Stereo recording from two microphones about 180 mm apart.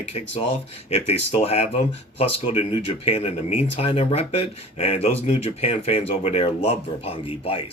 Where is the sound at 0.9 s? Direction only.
35° left (ahead or behind).